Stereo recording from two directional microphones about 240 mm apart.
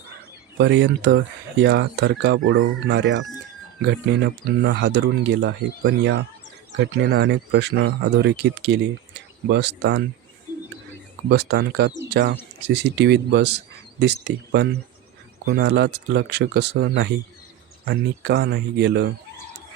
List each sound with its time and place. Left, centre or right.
0.6 s speech: right
4.6 s speech: right
11.3 s speech: right